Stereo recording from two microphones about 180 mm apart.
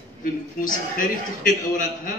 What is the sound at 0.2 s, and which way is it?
A man's voice, 50° left (ahead or behind).